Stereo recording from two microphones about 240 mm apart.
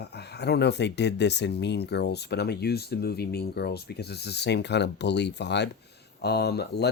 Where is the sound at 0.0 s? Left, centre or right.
Left.